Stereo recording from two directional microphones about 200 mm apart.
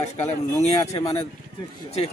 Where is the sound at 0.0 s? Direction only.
35° left (ahead or behind).